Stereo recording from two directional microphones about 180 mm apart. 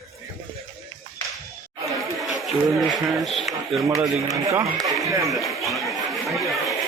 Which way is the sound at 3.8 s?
15° right (ahead or behind).